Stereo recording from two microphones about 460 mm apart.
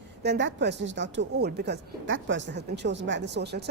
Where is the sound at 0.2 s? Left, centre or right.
Right.